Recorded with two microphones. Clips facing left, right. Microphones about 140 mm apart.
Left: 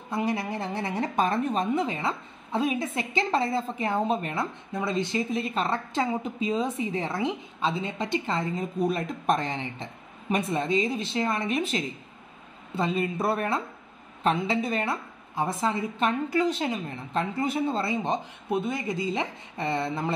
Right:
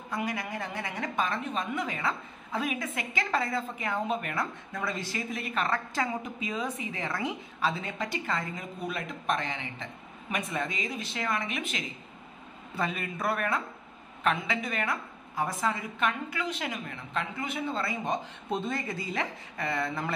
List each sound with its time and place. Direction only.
0.1 s a woman's voice: 30° left (ahead or behind)
8.7 s a woman's voice: 40° left (ahead or behind)
18.5 s a woman's voice: 15° left (ahead or behind)